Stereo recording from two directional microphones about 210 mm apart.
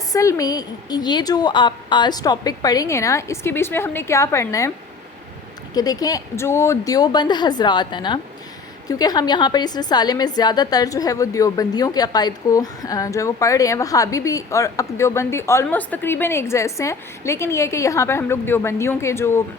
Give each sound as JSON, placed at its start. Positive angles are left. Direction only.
{"t": 0.1, "sound": "a woman's voice", "side_deg": 15}
{"t": 5.7, "sound": "a woman's voice", "side_deg": 20}